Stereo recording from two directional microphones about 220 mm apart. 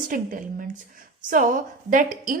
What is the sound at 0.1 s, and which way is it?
A woman's voice, 40° right (ahead or behind).